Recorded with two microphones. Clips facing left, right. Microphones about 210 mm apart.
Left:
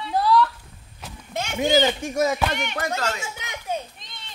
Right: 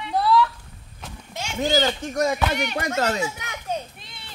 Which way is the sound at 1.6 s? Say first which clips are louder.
Left 2 dB; 20° left (ahead or behind).